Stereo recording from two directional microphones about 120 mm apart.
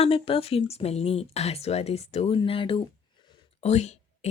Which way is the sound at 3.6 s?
65° left (ahead or behind).